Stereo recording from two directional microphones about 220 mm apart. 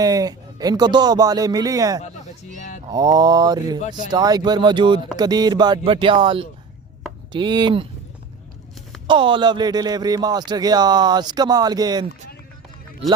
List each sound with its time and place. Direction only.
0.0 s speech: 15° right (ahead or behind)
2.0 s a sound: 30° left (ahead or behind)
2.9 s speech: 15° right (ahead or behind)
9.0 s speech: 20° right (ahead or behind)